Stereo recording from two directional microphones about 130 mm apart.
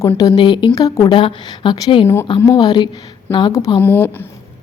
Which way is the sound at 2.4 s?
30° left (ahead or behind).